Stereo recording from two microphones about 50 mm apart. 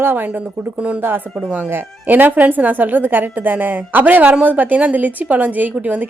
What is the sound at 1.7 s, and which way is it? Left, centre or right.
A woman's voice, right.